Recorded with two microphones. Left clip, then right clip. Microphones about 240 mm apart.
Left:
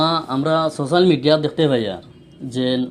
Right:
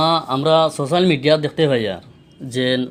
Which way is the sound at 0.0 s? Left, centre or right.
Right.